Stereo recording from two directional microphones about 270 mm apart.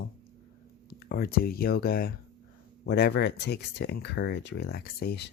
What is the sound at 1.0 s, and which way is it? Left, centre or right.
Speech, left.